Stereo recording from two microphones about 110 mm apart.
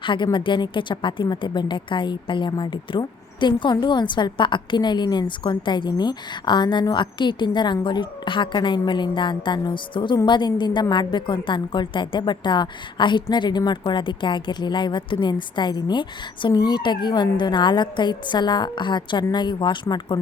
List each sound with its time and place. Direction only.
0.0 s a woman's voice: 45° left (ahead or behind)